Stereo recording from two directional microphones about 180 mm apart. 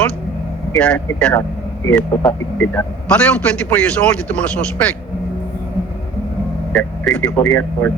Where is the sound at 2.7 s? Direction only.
5° left (ahead or behind).